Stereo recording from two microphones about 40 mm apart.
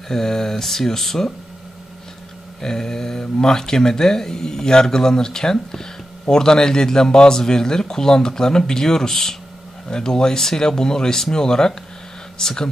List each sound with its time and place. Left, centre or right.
0.1 s speech: centre
2.6 s speech: centre